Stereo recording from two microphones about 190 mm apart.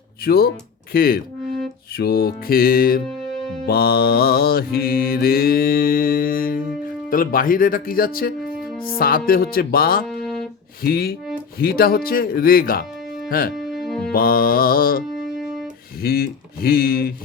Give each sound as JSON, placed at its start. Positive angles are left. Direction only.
{"t": 0.3, "sound": "mantra", "side_deg": 55}
{"t": 13.2, "sound": "speech", "side_deg": 50}
{"t": 13.8, "sound": "music", "side_deg": 5}
{"t": 14.1, "sound": "mantra", "side_deg": 50}